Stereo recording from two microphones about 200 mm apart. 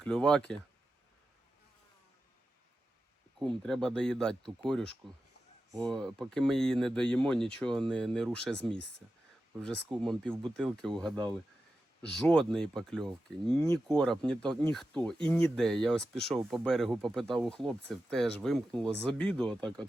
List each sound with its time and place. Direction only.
0.0 s speech: 5° left (ahead or behind)
3.3 s speech: 5° left (ahead or behind)
5.9 s speech: centre (ahead or behind)
10.9 s speech: 25° right (ahead or behind)
12.0 s speech: 5° left (ahead or behind)